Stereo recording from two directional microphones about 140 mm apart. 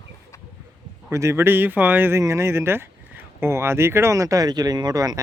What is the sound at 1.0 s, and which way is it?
Speech, 20° right (ahead or behind).